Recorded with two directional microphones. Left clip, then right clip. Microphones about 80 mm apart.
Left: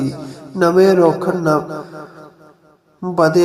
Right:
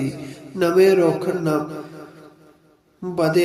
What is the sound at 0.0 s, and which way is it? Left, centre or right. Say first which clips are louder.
Speech: left 4 dB; left.